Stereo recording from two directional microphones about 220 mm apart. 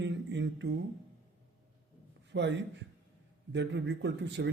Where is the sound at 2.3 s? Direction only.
55° right (ahead or behind).